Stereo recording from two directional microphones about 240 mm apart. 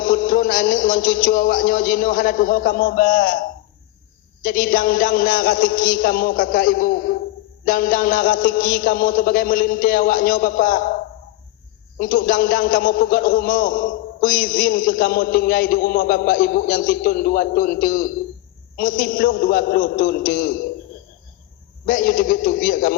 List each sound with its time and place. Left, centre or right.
0.0 s a man's voice: left
4.4 s a man's voice: left
11.9 s a man's voice: left
21.8 s a man's voice: left